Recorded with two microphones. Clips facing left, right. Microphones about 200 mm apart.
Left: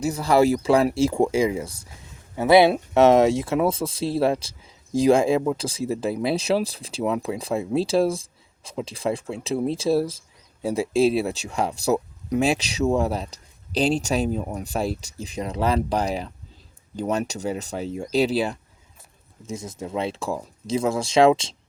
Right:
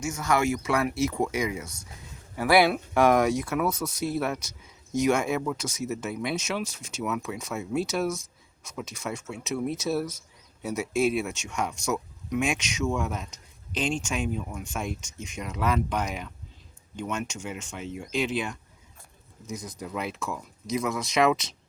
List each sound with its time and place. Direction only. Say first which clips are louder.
0.0 s speech: left 7 dB; 35° left (ahead or behind)